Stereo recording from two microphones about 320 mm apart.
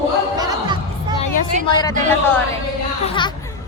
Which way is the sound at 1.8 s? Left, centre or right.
Centre.